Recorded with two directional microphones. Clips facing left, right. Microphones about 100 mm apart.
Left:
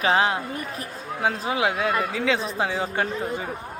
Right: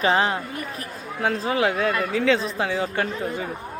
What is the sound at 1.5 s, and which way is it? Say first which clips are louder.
Speech: right 3 dB; 15° left (ahead or behind).